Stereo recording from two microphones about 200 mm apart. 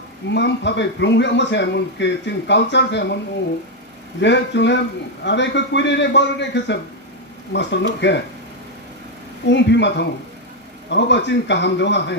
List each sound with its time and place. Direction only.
0.3 s a man's voice: 60° left (ahead or behind)
4.2 s a man's voice: 60° left (ahead or behind)
9.5 s a man's voice: 60° left (ahead or behind)